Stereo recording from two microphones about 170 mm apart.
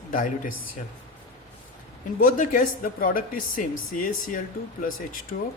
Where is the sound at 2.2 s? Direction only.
50° left (ahead or behind).